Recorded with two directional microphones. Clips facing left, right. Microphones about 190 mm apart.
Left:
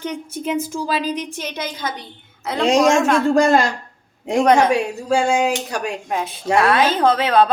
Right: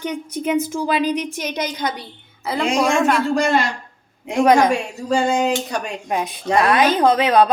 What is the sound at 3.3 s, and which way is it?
Speech, 45° left (ahead or behind).